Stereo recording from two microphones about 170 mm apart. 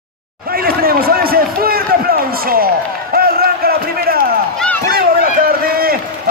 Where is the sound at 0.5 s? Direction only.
60° right (ahead or behind).